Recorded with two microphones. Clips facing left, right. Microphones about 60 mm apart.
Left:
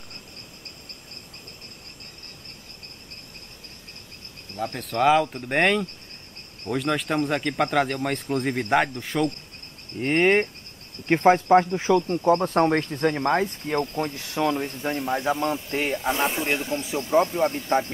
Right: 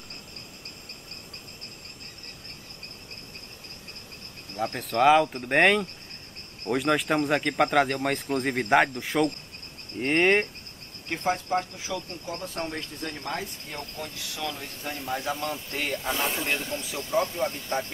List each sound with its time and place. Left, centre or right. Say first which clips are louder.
4.6 s speech: even; centre
11.1 s speech: left 10 dB; left; by 16.8 s centre
16.8 s speech: left 7 dB; left